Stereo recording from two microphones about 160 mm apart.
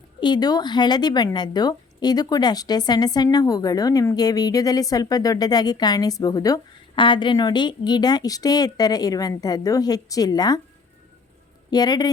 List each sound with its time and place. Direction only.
0.2 s a woman's voice: 25° left (ahead or behind)
11.7 s a woman's voice: 25° left (ahead or behind)